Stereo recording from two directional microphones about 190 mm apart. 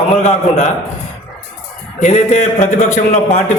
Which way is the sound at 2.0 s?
35° left (ahead or behind).